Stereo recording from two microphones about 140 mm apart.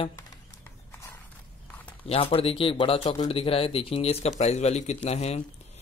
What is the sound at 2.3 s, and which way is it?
Speech, 40° left (ahead or behind).